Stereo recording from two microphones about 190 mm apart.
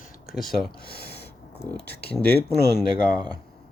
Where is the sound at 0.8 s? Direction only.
55° left (ahead or behind).